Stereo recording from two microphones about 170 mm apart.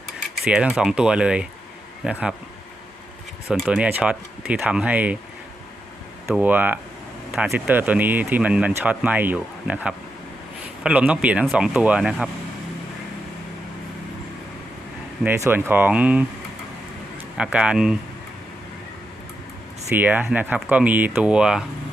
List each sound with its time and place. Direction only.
0.4 s speech: 5° right (ahead or behind)
3.5 s speech: 5° right (ahead or behind)
6.2 s speech: 5° right (ahead or behind)
7.3 s a sound: 5° right (ahead or behind)
7.7 s speech: 10° right (ahead or behind)
15.2 s speech: 15° right (ahead or behind)
17.3 s speech: 5° right (ahead or behind)
20.0 s speech: 10° right (ahead or behind)